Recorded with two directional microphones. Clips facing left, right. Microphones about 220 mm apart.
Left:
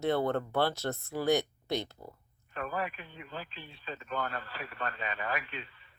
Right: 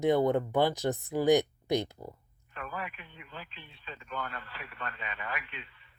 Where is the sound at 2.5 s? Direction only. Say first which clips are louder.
Left 5 dB; 40° left (ahead or behind).